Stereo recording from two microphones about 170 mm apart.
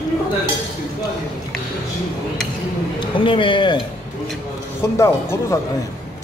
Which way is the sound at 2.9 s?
30° left (ahead or behind).